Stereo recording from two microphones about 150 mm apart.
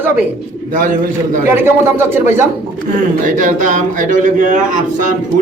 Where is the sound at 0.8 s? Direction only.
60° right (ahead or behind).